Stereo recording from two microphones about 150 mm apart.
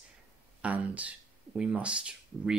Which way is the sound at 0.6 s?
10° right (ahead or behind).